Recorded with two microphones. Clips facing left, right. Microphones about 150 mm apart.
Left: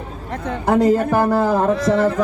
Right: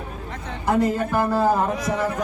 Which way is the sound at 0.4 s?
55° left (ahead or behind).